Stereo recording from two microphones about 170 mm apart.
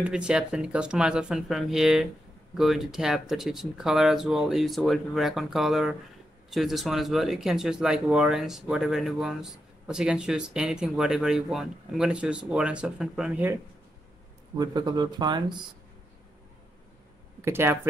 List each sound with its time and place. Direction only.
0.0 s speech: 5° right (ahead or behind)
14.6 s speech: 25° right (ahead or behind)
17.4 s speech: 15° right (ahead or behind)